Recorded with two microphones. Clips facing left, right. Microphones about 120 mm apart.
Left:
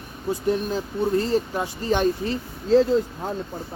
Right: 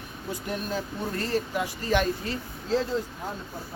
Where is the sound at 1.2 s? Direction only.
25° left (ahead or behind).